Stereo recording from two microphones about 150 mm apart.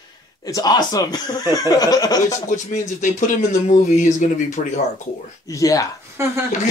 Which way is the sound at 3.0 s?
55° left (ahead or behind).